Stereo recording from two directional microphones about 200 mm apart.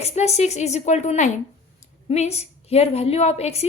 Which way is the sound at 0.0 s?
30° left (ahead or behind).